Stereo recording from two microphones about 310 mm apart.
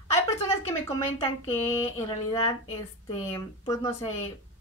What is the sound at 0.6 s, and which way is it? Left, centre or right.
Speech, centre.